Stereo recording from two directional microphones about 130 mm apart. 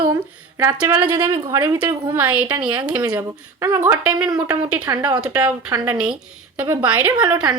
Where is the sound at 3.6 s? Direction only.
20° right (ahead or behind).